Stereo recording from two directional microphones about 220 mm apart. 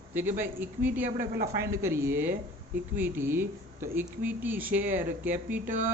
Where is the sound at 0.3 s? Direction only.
10° right (ahead or behind).